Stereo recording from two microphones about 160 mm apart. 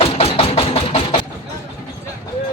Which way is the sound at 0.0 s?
40° left (ahead or behind).